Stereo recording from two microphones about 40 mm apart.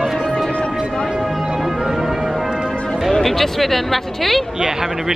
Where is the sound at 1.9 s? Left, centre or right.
Centre.